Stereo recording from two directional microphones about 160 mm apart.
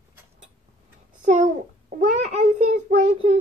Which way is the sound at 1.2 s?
50° right (ahead or behind).